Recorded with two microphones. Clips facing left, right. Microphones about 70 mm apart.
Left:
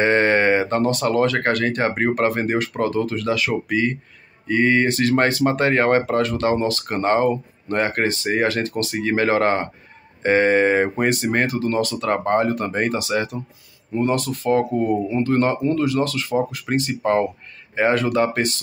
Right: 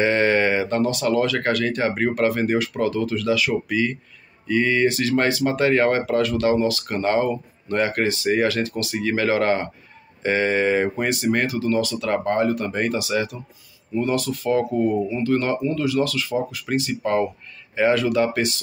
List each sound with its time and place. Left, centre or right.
0.0 s speech: left